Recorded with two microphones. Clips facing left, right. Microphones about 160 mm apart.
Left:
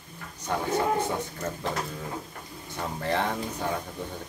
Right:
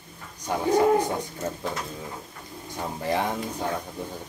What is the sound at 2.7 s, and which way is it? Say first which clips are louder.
Speech: right 1 dB; 15° right (ahead or behind).